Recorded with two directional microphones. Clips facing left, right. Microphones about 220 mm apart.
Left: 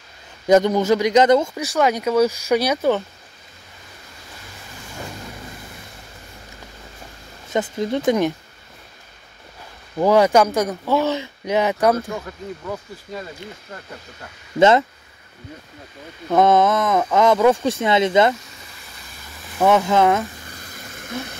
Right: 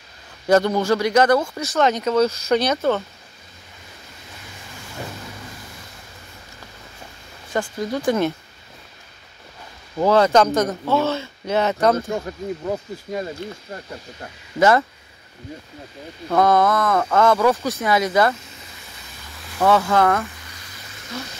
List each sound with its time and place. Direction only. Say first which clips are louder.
0.5 s speech: left 2 dB; 15° left (ahead or behind)
7.4 s speech: left 2 dB; 20° left (ahead or behind)
9.9 s speech: left 1 dB; 15° left (ahead or behind)
14.6 s speech: left 2 dB; 20° left (ahead or behind)
16.3 s speech: left 2 dB; 20° left (ahead or behind)
19.6 s speech: left 1 dB; 20° left (ahead or behind)
20.5 s a sound: left 5 dB; 50° left (ahead or behind)